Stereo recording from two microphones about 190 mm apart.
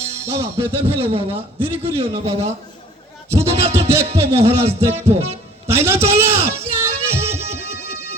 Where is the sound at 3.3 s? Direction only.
15° right (ahead or behind).